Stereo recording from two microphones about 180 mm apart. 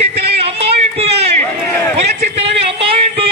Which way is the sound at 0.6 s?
35° right (ahead or behind).